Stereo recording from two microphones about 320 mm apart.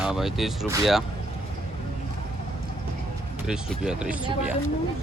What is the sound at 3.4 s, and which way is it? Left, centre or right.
Speech, centre.